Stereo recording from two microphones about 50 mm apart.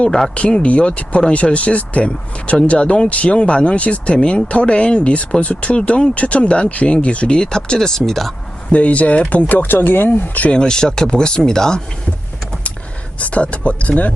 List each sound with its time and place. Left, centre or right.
0.6 s speech: left; by 8.3 s centre
8.7 s speech: left
10.5 s speech: centre
13.1 s speech: left